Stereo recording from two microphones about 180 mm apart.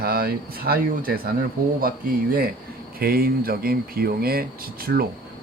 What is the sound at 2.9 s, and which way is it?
Speech, 55° right (ahead or behind).